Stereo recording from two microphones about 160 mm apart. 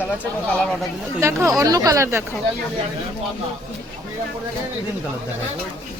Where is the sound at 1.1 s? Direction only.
20° right (ahead or behind).